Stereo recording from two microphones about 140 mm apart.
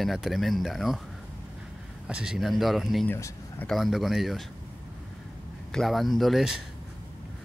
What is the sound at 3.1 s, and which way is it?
Speech, 15° left (ahead or behind).